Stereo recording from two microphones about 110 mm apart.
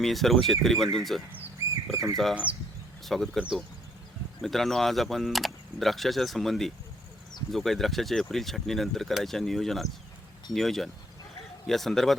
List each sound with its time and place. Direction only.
0.0 s speech: centre (ahead or behind)
1.6 s a sound: 25° right (ahead or behind)
2.3 s speech: 10° right (ahead or behind)
3.0 s speech: centre (ahead or behind)